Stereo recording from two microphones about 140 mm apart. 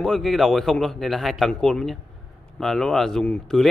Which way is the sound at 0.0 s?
Centre (ahead or behind).